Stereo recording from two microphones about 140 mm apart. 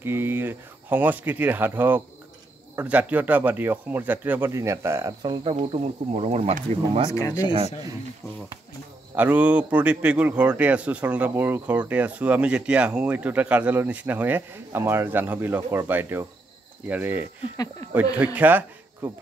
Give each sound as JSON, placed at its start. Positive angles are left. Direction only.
{"t": 0.0, "sound": "a man's voice", "side_deg": -15}
{"t": 5.2, "sound": "speech", "side_deg": -40}
{"t": 7.1, "sound": "speech", "side_deg": 25}
{"t": 9.1, "sound": "a man's voice", "side_deg": -10}